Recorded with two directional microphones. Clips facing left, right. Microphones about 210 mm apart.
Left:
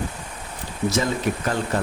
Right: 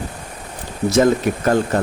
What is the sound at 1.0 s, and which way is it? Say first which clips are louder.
Speech: right 8 dB; 50° right (ahead or behind).